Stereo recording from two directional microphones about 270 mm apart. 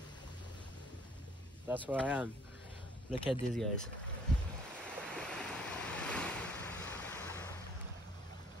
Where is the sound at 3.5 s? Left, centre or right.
Centre.